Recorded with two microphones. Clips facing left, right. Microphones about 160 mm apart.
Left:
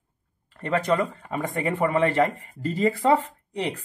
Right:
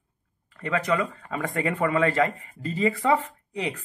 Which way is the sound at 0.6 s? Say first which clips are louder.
Left 2 dB; 30° left (ahead or behind).